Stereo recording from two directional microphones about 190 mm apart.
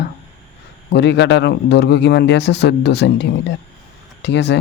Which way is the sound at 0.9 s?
65° left (ahead or behind).